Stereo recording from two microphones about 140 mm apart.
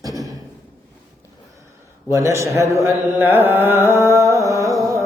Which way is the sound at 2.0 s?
20° right (ahead or behind).